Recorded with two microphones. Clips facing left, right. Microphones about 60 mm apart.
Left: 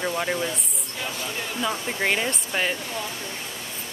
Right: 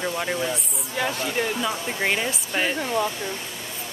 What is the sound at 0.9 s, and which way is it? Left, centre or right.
Speech, right.